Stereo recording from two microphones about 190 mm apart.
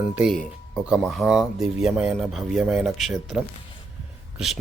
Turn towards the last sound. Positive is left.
turn(degrees=0)  # may be behind; listen again after turning